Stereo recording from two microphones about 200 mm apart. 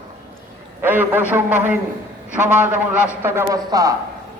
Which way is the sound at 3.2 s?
10° right (ahead or behind).